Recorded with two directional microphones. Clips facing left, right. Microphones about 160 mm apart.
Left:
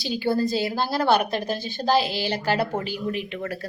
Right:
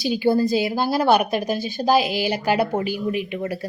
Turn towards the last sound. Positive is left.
turn(degrees=-15)  # may be behind; listen again after turning